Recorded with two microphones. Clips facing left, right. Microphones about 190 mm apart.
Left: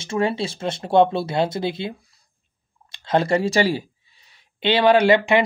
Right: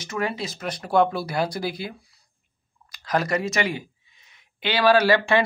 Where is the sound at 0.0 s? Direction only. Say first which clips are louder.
Left 5 dB; 30° left (ahead or behind).